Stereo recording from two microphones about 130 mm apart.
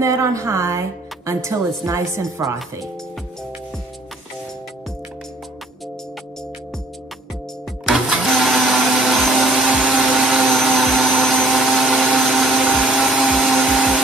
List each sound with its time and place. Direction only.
0.0 s speech: 25° right (ahead or behind)
7.8 s vacuum cleaner: 5° right (ahead or behind)